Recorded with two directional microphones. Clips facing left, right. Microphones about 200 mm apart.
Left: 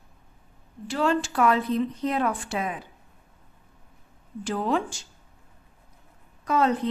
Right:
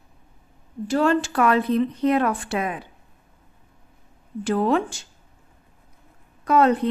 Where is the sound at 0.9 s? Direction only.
55° right (ahead or behind).